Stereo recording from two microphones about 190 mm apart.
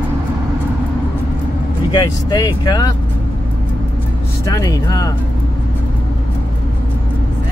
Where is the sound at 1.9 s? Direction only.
25° left (ahead or behind).